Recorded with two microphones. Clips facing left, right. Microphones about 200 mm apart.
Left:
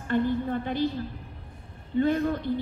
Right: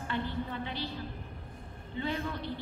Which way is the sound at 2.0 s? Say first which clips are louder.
Left 11 dB; 45° left (ahead or behind).